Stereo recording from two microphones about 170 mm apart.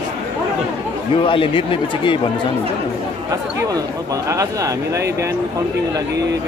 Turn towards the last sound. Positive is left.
turn(degrees=-15)  # may be behind; listen again after turning